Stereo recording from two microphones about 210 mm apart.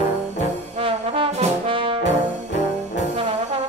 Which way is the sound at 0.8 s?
25° right (ahead or behind).